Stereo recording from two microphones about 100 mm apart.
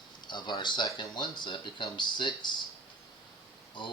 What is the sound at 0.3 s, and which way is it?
Speech, 50° left (ahead or behind).